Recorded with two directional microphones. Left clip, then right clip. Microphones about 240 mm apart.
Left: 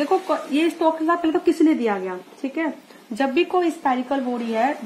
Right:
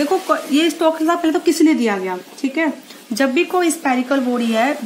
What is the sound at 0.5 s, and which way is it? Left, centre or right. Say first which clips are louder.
Speech: right 3 dB; right.